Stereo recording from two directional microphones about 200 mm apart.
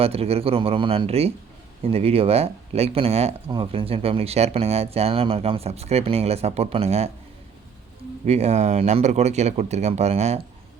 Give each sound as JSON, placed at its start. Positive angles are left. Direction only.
{"t": 0.0, "sound": "speech", "side_deg": -30}
{"t": 8.2, "sound": "speech", "side_deg": -30}